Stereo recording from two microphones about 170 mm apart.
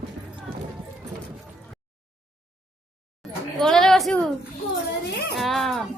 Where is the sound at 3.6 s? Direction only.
5° left (ahead or behind).